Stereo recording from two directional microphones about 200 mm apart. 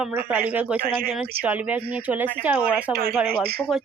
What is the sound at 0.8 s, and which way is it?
Speech, 45° right (ahead or behind).